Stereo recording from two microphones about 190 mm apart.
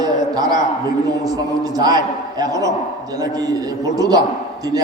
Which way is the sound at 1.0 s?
20° right (ahead or behind).